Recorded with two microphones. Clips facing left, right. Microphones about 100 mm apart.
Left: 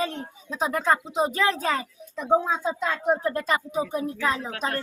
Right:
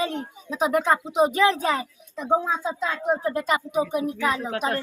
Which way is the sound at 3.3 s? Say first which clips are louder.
Right 2 dB; 15° right (ahead or behind).